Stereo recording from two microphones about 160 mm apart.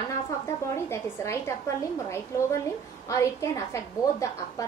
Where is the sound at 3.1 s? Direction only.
20° left (ahead or behind).